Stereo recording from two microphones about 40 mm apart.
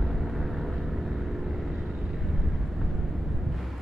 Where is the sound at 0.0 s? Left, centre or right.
Centre.